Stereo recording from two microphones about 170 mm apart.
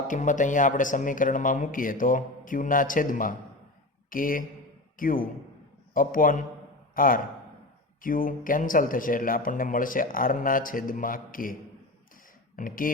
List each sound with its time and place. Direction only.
0.1 s a man's voice: 50° left (ahead or behind)
12.5 s speech: 55° left (ahead or behind)